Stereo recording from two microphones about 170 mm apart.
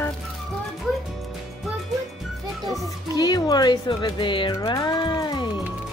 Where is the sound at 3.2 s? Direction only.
25° left (ahead or behind).